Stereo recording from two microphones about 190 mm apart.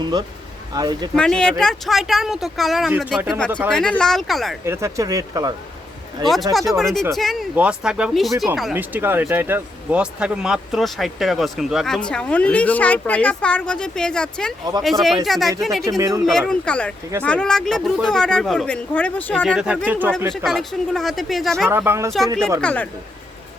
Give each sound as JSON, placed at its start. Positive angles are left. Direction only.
{"t": 0.0, "sound": "speech", "side_deg": -20}
{"t": 1.1, "sound": "speech", "side_deg": 5}
{"t": 4.6, "sound": "speech", "side_deg": -15}
{"t": 6.2, "sound": "speech", "side_deg": 0}
{"t": 15.8, "sound": "speech", "side_deg": -15}
{"t": 16.5, "sound": "speech", "side_deg": 5}
{"t": 20.1, "sound": "speech", "side_deg": 0}
{"t": 21.7, "sound": "speech", "side_deg": -10}
{"t": 22.6, "sound": "speech", "side_deg": 5}